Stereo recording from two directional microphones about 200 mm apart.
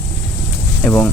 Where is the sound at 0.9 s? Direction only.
10° left (ahead or behind).